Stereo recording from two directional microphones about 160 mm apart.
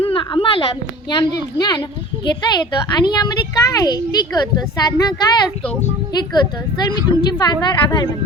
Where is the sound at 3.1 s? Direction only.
25° left (ahead or behind).